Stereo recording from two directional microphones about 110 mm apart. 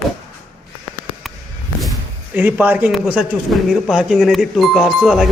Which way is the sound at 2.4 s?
15° right (ahead or behind).